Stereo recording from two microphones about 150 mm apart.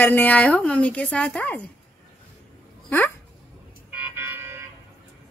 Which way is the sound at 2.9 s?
15° left (ahead or behind).